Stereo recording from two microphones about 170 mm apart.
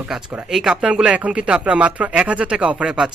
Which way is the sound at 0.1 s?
5° right (ahead or behind).